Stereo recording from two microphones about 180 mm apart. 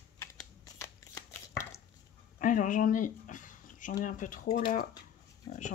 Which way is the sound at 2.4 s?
45° left (ahead or behind).